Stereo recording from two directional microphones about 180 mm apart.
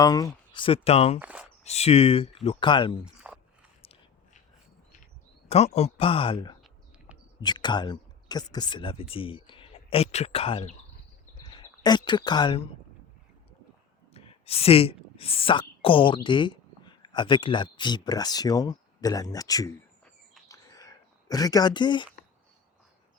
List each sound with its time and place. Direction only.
0.0 s speech: 20° left (ahead or behind); by 1.2 s 35° left (ahead or behind)
1.2 s speech: 5° right (ahead or behind)
1.6 s speech: 35° left (ahead or behind)
3.3 s biting: 5° right (ahead or behind)
5.5 s speech: 35° left (ahead or behind)
7.1 s a sound: 10° right (ahead or behind)
7.4 s speech: 25° left (ahead or behind)
14.1 s speech: 35° left (ahead or behind)
20.5 s a sound: 20° left (ahead or behind)